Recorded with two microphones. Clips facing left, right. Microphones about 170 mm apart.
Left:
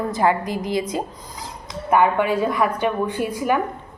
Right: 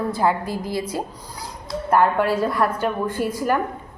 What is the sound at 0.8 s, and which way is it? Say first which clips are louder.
Speech: left 2 dB; 10° right (ahead or behind).